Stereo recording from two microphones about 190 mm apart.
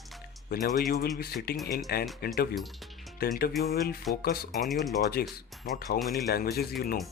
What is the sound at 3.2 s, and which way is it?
Speech, 55° left (ahead or behind).